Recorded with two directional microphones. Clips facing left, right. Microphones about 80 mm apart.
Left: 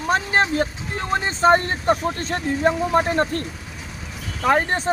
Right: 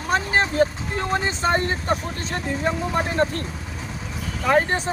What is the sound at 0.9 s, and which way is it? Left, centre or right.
Speech, left.